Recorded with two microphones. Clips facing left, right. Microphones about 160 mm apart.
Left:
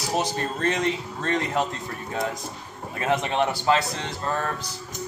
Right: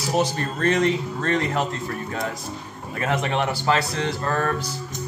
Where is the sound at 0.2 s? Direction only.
20° left (ahead or behind).